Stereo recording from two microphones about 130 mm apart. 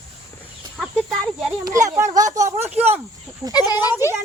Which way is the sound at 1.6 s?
25° right (ahead or behind).